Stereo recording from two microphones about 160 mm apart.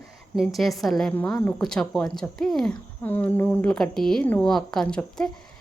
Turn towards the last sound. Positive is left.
turn(degrees=5)  # may be behind; listen again after turning